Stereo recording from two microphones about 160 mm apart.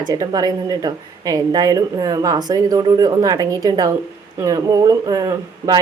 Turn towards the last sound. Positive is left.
turn(degrees=-25)  # may be behind; listen again after turning